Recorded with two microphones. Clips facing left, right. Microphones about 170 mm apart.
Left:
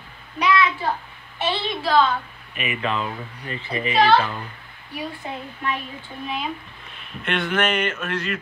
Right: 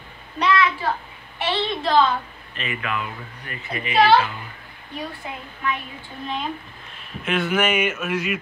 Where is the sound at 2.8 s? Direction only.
30° left (ahead or behind).